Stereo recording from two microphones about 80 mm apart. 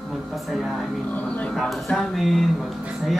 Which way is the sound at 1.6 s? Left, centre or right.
Centre.